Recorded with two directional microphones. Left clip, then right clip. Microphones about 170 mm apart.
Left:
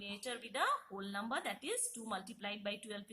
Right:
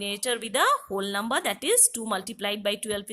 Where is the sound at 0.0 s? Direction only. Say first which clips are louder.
Right 15 dB; 50° right (ahead or behind).